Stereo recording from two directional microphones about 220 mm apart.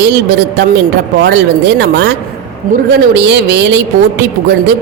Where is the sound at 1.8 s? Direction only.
50° right (ahead or behind).